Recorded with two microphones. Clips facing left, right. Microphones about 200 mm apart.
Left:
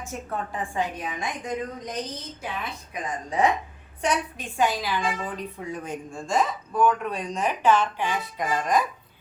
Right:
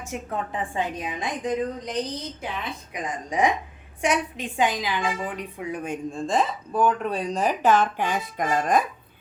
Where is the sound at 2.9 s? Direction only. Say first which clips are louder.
Even; 15° right (ahead or behind).